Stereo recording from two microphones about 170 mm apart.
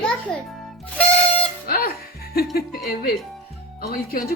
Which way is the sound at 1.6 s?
65° left (ahead or behind).